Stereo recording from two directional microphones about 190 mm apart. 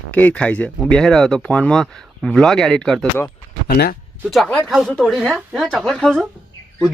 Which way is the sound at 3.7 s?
55° left (ahead or behind).